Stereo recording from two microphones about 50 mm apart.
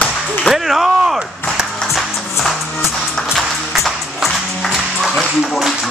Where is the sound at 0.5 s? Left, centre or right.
Centre.